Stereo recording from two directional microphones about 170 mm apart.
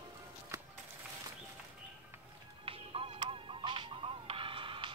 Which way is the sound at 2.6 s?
35° right (ahead or behind).